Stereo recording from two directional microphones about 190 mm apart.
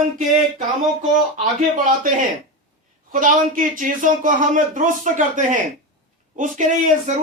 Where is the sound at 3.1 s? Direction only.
45° right (ahead or behind).